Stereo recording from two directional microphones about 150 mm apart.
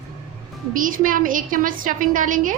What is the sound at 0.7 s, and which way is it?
A woman's voice, 65° right (ahead or behind).